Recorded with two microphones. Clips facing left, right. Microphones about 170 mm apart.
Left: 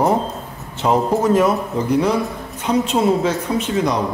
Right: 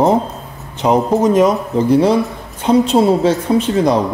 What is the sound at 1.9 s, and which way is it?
A woman's voice, 30° right (ahead or behind).